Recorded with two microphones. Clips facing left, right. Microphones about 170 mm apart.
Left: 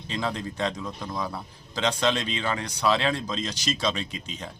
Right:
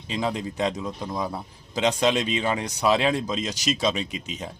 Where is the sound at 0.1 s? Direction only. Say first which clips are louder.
Right 3 dB; 10° right (ahead or behind).